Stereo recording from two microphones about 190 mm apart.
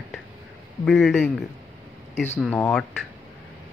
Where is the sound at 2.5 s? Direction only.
5° left (ahead or behind).